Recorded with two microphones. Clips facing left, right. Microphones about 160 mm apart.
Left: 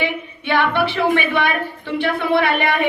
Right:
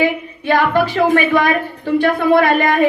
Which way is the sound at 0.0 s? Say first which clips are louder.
Right 6 dB; 40° right (ahead or behind).